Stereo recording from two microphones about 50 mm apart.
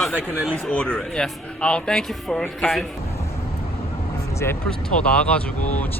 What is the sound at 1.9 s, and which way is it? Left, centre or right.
Speech, centre.